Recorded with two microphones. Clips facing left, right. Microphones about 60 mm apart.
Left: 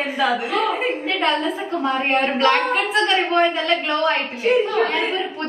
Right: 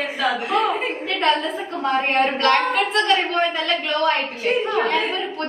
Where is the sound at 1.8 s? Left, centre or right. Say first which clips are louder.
Right 1 dB; centre.